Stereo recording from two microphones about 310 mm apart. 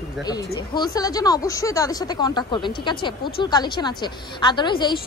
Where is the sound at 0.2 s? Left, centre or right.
Centre.